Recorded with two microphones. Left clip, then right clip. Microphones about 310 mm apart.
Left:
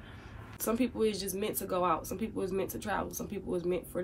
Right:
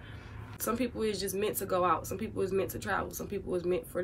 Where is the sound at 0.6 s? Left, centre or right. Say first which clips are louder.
Left 2 dB; centre.